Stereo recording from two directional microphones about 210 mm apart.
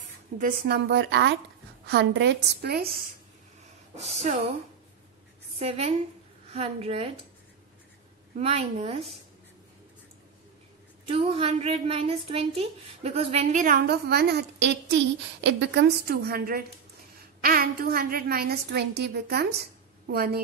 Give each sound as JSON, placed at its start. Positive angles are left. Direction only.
{"t": 0.4, "sound": "a woman's voice", "side_deg": -45}
{"t": 4.0, "sound": "a woman's voice", "side_deg": -30}
{"t": 5.6, "sound": "a woman's voice", "side_deg": -30}
{"t": 8.4, "sound": "a woman's voice", "side_deg": -30}
{"t": 11.1, "sound": "a woman's voice", "side_deg": -25}